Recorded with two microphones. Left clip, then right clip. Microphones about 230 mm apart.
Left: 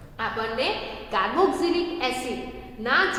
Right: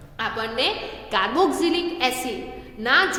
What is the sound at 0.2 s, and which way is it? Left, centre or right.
A woman's voice, right.